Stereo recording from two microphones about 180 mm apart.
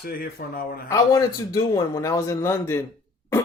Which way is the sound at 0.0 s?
55° left (ahead or behind).